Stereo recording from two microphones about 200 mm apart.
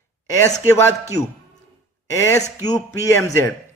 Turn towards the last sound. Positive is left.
turn(degrees=15)  # may be behind; listen again after turning